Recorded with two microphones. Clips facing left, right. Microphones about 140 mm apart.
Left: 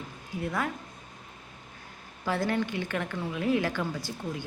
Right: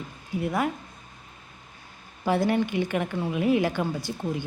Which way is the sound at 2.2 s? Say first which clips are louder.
Right 5 dB; 15° right (ahead or behind).